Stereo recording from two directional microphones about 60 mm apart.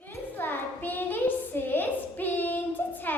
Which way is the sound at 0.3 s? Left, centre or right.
Left.